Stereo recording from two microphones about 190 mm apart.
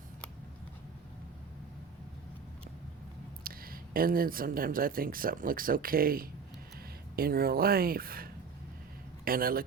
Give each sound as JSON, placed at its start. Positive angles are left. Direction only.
{"t": 3.4, "sound": "speech", "side_deg": -50}